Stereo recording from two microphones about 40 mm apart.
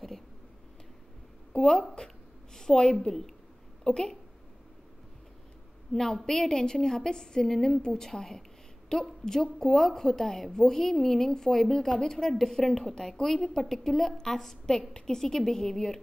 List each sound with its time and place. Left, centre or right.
1.6 s a woman's voice: left
5.9 s a woman's voice: centre